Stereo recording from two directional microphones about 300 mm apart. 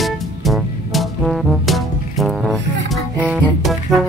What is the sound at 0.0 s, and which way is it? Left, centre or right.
Music, centre.